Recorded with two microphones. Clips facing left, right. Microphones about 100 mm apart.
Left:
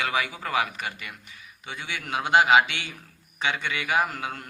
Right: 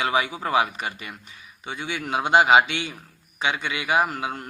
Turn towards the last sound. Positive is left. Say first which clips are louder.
# right 3 dB
turn(degrees=-15)  # may be behind; listen again after turning